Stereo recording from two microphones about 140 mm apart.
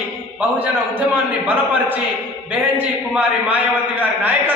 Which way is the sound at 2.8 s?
10° right (ahead or behind).